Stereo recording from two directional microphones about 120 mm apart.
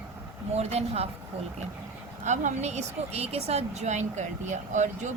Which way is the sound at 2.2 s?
85° right.